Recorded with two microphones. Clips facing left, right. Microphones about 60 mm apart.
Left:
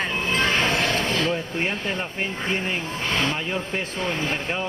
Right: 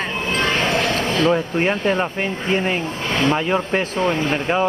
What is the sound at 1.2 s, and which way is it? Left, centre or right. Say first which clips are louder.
Speech: right 7 dB; right.